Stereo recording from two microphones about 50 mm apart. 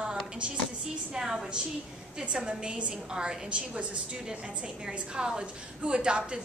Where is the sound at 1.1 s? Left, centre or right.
Centre.